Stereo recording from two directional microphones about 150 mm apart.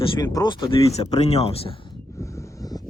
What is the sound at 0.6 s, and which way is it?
Speech, 35° left (ahead or behind).